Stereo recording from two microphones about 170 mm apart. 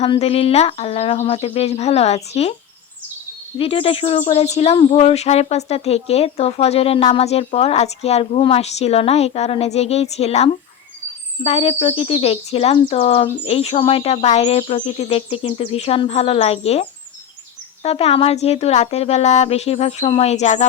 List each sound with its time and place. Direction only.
0.0 s speech: 35° left (ahead or behind)
3.6 s speech: 35° left (ahead or behind)
17.8 s speech: 35° left (ahead or behind)